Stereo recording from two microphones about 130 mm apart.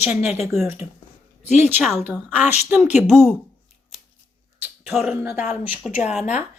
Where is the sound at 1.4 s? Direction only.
60° left (ahead or behind).